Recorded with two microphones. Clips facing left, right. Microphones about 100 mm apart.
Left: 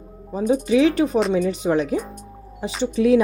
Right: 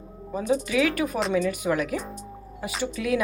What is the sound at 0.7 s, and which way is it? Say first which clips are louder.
Speech: left 7 dB; 25° left (ahead or behind).